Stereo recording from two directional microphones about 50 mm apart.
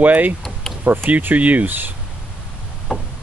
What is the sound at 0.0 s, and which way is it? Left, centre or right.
Speech, right.